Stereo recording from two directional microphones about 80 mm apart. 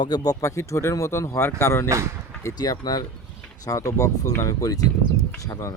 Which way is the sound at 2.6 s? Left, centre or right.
Left.